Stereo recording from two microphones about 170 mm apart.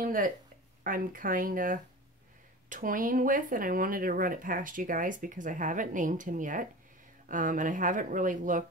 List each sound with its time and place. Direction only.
0.0 s speech: 55° right (ahead or behind)